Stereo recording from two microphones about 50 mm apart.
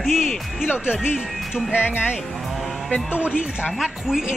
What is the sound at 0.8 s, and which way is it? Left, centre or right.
Speech, centre.